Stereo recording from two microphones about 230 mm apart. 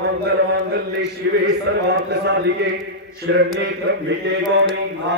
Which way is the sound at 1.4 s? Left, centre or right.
Right.